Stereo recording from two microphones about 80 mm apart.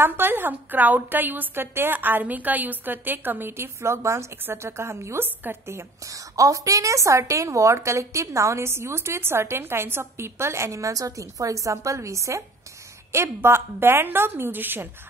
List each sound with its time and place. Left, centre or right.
0.0 s a woman's voice: right
6.3 s a woman's voice: right